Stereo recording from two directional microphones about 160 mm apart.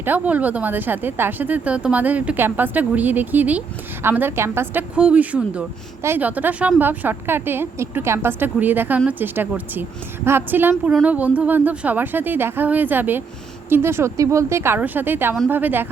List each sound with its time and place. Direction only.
0.0 s a woman's voice: 10° right (ahead or behind)